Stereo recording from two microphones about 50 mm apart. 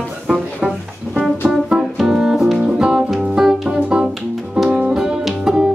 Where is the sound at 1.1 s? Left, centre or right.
Left.